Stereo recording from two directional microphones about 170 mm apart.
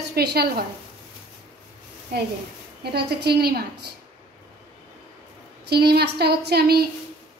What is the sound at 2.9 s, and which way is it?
Speech, 70° right (ahead or behind).